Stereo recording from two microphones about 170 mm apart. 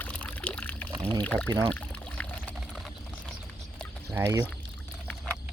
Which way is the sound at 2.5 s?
Centre (ahead or behind).